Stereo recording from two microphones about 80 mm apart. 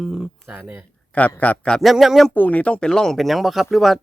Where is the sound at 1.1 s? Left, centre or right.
Centre.